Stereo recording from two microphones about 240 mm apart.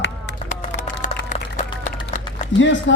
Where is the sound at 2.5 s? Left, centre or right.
Left.